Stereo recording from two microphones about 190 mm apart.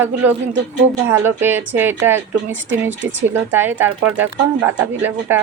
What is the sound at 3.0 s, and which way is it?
Speech, 70° right (ahead or behind).